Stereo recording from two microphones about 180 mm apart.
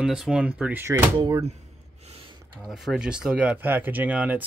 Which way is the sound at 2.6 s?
Centre (ahead or behind).